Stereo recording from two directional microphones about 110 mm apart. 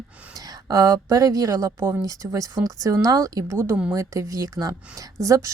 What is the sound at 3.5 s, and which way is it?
Speech, 20° right (ahead or behind).